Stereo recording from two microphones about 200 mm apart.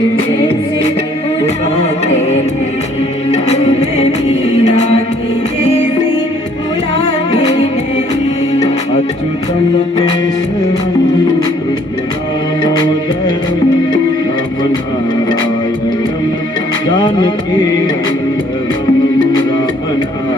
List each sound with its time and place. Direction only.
1.7 s music: 35° left (ahead or behind)
17.0 s music: 20° left (ahead or behind)